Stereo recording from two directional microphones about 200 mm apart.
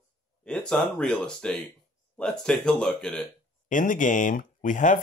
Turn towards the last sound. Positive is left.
turn(degrees=40)  # may be behind; listen again after turning